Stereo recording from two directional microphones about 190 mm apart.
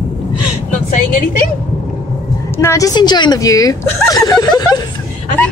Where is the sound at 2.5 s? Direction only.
15° left (ahead or behind).